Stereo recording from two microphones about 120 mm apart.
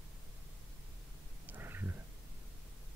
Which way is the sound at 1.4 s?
15° right (ahead or behind).